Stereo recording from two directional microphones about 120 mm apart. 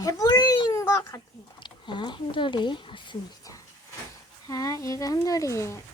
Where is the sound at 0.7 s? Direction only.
25° left (ahead or behind).